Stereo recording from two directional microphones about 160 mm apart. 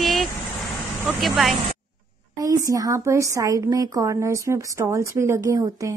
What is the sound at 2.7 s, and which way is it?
A woman's voice, 20° right (ahead or behind).